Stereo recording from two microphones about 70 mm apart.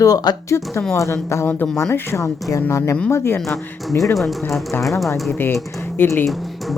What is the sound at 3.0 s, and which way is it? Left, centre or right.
Speech, left.